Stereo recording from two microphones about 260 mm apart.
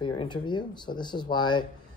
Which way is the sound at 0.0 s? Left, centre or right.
Centre.